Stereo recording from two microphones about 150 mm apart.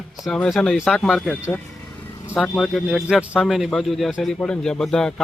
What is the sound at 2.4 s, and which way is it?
A man's voice, 5° left (ahead or behind).